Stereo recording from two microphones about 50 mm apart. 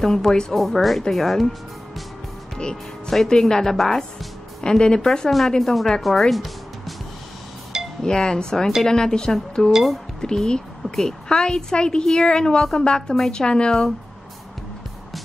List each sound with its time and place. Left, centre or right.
0.0 s a woman's voice: centre
2.5 s a woman's voice: centre
4.6 s a woman's voice: centre
8.0 s a woman's voice: centre